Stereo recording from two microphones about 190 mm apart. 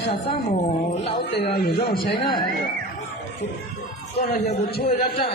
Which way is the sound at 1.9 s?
25° left (ahead or behind).